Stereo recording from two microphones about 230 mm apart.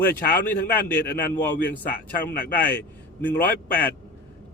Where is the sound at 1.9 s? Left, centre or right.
Left.